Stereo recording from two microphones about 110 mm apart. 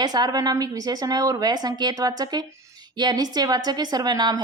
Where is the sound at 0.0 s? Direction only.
40° right (ahead or behind).